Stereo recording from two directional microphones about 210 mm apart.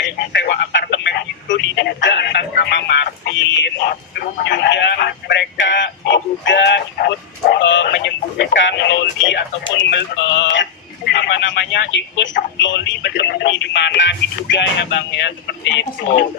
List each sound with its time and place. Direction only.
0.0 s telephone: 55° left (ahead or behind)
4.4 s a sound: 55° left (ahead or behind)
7.5 s radio: 60° left (ahead or behind)